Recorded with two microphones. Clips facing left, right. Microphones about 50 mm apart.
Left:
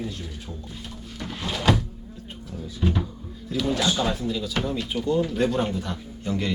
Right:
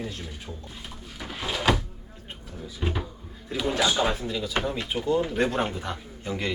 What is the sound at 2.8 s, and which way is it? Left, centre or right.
Speech, centre.